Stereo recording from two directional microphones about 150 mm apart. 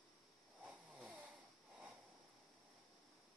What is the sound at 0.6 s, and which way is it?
Snoring, 5° right (ahead or behind).